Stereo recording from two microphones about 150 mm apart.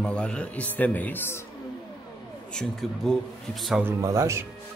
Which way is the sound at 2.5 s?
5° left (ahead or behind).